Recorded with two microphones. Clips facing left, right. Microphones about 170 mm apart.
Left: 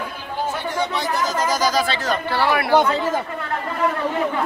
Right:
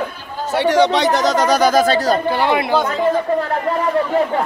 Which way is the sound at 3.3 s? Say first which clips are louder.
Right 12 dB; 35° right (ahead or behind).